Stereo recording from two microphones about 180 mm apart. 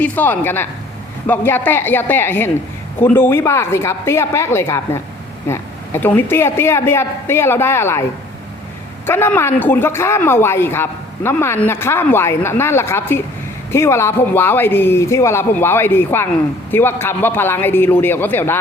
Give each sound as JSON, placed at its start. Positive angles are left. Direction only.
{"t": 0.0, "sound": "a man's voice", "side_deg": 10}
{"t": 9.0, "sound": "a man's voice", "side_deg": 10}